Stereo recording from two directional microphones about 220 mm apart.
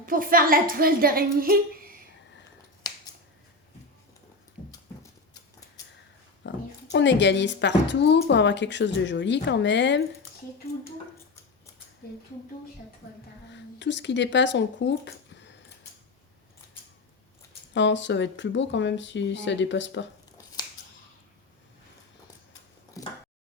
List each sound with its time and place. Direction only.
0.0 s a woman's voice: 40° right (ahead or behind)
6.4 s a sound: 55° left (ahead or behind)
6.9 s a woman's voice: 55° left (ahead or behind)
13.5 s speech: 55° left (ahead or behind)
17.7 s speech: 55° left (ahead or behind)